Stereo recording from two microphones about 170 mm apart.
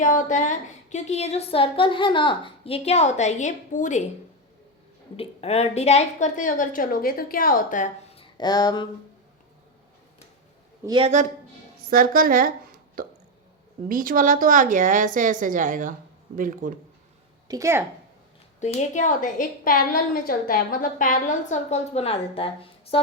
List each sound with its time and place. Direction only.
0.0 s a woman's voice: 50° left (ahead or behind)
5.1 s a woman's voice: 35° left (ahead or behind); by 7.9 s 50° left (ahead or behind)
8.1 s speech: 30° left (ahead or behind)
10.8 s a man's voice: 30° right (ahead or behind)
11.9 s a woman's voice: 60° right (ahead or behind)
13.0 s hiccup: 60° right (ahead or behind)
13.8 s a woman's voice: 55° right (ahead or behind)
17.5 s speech: 15° right (ahead or behind)
18.6 s a woman's voice: 40° left (ahead or behind)